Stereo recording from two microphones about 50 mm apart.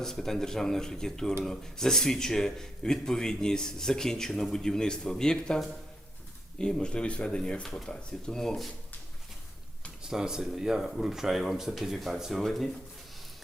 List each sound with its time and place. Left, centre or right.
0.0 s a man's voice: centre
6.6 s a man's voice: centre
10.1 s speech: centre
12.4 s speech: centre